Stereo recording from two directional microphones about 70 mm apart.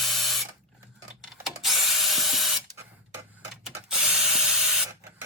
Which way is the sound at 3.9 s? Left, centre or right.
Centre.